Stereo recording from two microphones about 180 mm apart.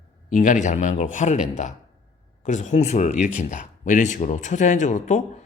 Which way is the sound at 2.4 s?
40° left (ahead or behind).